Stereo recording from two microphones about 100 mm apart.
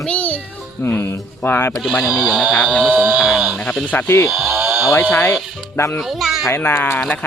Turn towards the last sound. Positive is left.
turn(degrees=20)  # may be behind; listen again after turning